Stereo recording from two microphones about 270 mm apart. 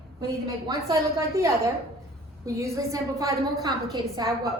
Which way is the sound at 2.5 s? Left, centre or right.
Centre.